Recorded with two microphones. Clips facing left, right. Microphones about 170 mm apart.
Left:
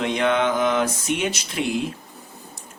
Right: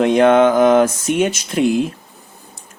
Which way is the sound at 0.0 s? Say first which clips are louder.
Right 10 dB; 45° right (ahead or behind).